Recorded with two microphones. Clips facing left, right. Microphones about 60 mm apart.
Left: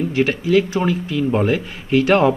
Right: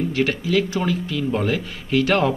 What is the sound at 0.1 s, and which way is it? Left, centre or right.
Speech, centre.